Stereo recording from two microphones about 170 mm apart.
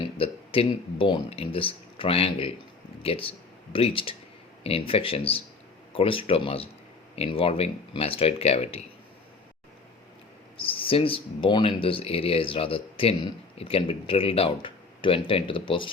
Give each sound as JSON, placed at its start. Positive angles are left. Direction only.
{"t": 0.2, "sound": "speech", "side_deg": 35}
{"t": 10.6, "sound": "speech", "side_deg": 30}